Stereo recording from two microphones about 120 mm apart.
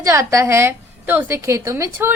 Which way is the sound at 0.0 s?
25° right (ahead or behind).